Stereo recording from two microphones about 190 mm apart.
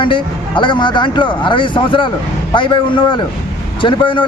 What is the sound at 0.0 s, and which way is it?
A man's voice, 25° left (ahead or behind).